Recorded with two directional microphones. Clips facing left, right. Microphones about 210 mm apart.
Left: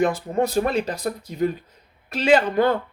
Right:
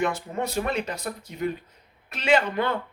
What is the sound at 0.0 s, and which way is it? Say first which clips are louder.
Speech: left 6 dB; 35° left (ahead or behind).